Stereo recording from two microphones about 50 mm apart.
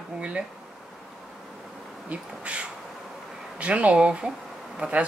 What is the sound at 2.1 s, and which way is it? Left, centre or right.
Speech, right.